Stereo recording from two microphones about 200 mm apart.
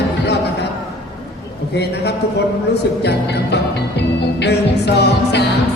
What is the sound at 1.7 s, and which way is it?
Music, 55° left (ahead or behind).